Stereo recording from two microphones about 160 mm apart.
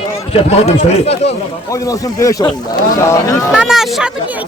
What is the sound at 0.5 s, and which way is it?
Speech, 40° left (ahead or behind).